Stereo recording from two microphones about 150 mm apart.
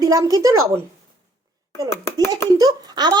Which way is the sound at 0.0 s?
25° right (ahead or behind).